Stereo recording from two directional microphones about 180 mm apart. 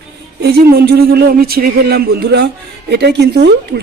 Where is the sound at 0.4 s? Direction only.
60° right (ahead or behind).